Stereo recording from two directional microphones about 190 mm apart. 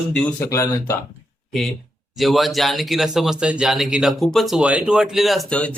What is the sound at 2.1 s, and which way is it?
Speech, centre (ahead or behind).